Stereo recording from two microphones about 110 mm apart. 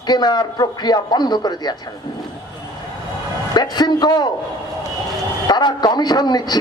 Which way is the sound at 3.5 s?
40° left (ahead or behind).